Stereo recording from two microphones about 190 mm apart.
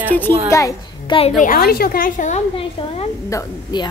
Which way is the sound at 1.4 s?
50° left (ahead or behind).